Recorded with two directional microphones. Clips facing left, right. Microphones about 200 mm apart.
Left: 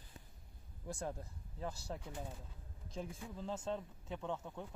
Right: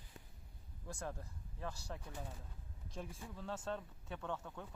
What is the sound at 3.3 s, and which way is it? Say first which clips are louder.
Speech: left 2 dB; 20° left (ahead or behind).